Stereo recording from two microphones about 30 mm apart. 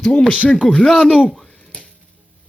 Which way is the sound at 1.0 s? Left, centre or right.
Left.